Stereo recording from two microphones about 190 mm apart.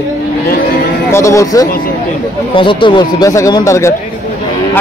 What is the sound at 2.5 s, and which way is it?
Speech, 25° left (ahead or behind).